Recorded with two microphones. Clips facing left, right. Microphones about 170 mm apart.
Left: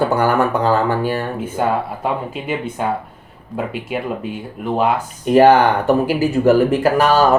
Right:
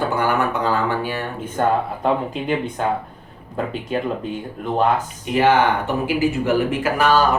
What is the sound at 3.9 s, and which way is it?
Speech, 10° left (ahead or behind).